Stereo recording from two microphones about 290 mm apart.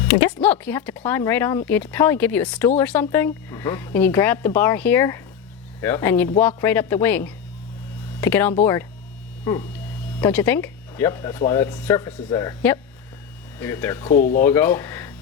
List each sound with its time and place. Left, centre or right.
0.4 s speech: centre
14.1 s speech: left
14.4 s speech: centre